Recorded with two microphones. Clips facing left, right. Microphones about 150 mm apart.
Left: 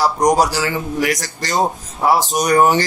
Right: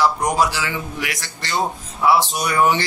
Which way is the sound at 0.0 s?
40° left (ahead or behind).